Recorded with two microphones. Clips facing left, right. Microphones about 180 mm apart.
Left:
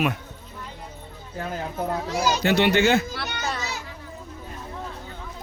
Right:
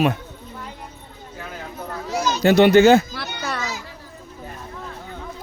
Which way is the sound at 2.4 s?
40° right (ahead or behind).